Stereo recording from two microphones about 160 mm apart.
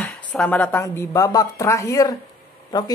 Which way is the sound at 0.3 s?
5° left (ahead or behind).